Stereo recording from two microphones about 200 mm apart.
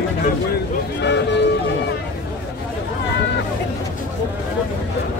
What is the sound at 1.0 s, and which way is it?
Vehicle, 60° left (ahead or behind).